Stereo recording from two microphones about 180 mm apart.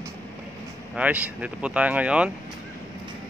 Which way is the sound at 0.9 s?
5° right (ahead or behind).